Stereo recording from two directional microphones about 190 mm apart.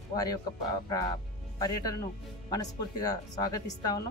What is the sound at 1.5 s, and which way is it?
Speech, 20° left (ahead or behind).